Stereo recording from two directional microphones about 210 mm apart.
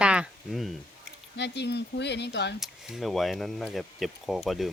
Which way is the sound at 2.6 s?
Centre (ahead or behind).